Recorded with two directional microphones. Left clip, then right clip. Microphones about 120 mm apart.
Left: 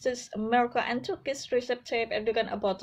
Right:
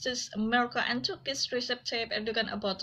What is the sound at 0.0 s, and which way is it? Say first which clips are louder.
Speech: left 3 dB; 50° left (ahead or behind).